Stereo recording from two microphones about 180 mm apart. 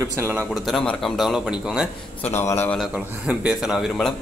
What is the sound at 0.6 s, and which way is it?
Speech, centre (ahead or behind).